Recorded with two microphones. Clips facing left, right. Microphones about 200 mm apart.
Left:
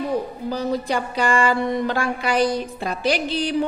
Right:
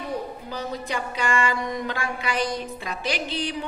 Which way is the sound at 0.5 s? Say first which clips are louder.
Left 9 dB; 35° left (ahead or behind).